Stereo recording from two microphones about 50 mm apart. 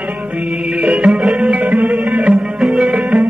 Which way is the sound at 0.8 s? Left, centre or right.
Right.